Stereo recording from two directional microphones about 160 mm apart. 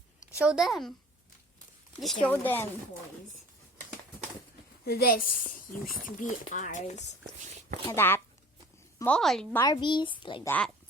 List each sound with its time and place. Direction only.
0.3 s a woman's voice: 5° right (ahead or behind)
2.0 s a woman's voice: centre (ahead or behind)
2.3 s speech: 10° left (ahead or behind)
4.9 s speech: 65° left (ahead or behind); by 7.0 s 50° left (ahead or behind)
7.5 s a sound: 40° right (ahead or behind)
7.9 s speech: 15° left (ahead or behind)
9.0 s a woman's voice: 5° left (ahead or behind)
9.5 s speech: 15° left (ahead or behind)
9.7 s a woman's voice: 30° left (ahead or behind)
10.4 s speech: 10° left (ahead or behind)